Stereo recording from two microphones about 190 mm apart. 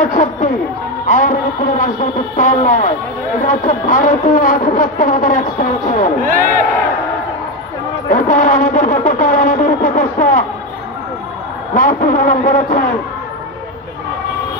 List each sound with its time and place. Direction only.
0.0 s speech: 45° left (ahead or behind)
1.0 s music: 45° left (ahead or behind)
2.3 s speech: 40° left (ahead or behind)
6.2 s speech: 45° right (ahead or behind)
8.1 s speech: 45° left (ahead or behind)
11.7 s speech: 45° left (ahead or behind)